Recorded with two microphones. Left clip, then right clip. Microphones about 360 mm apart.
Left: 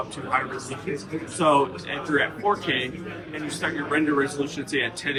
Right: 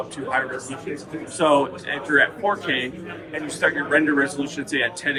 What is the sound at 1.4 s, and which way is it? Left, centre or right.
A man's voice, centre.